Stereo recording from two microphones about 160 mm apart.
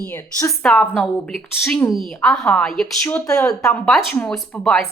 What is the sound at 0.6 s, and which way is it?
A woman's voice, 5° left (ahead or behind).